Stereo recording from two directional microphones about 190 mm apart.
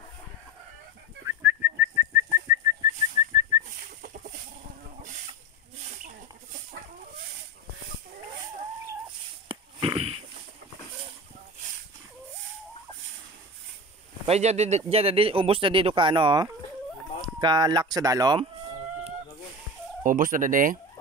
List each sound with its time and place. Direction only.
1.2 s whistling: 15° right (ahead or behind)
9.5 s fart: 30° right (ahead or behind)
14.2 s speech: 35° right (ahead or behind)
20.0 s fowl: 45° right (ahead or behind)